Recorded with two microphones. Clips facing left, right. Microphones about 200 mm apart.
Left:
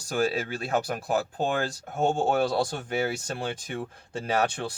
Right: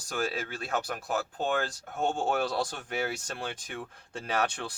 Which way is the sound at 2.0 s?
40° left (ahead or behind).